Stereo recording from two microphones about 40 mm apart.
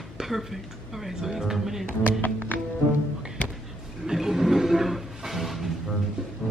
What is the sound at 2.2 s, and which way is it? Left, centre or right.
Music, left.